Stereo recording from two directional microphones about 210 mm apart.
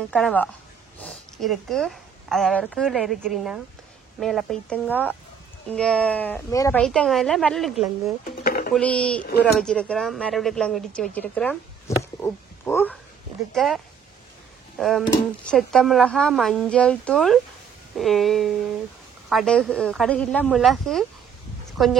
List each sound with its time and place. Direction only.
0.1 s speech: 5° left (ahead or behind)
8.2 s a sound: 45° left (ahead or behind)
8.7 s speech: 5° left (ahead or behind)
12.0 s a sound: 10° left (ahead or behind)
13.5 s speech: centre (ahead or behind)
14.8 s speech: centre (ahead or behind)